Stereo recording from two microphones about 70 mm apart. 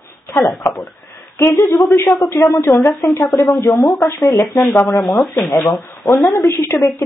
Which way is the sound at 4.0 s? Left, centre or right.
Left.